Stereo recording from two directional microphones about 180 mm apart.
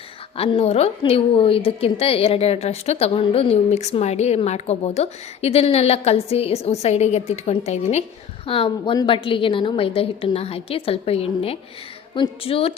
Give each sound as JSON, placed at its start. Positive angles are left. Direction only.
{"t": 0.3, "sound": "a woman's voice", "side_deg": 35}